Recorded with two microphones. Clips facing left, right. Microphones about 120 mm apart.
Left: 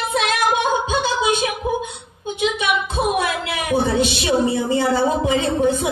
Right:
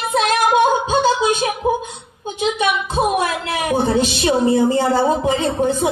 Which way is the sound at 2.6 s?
45° right (ahead or behind).